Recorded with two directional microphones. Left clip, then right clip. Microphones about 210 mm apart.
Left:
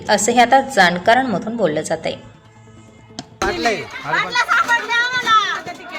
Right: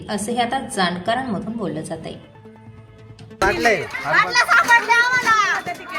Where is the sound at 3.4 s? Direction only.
5° right (ahead or behind).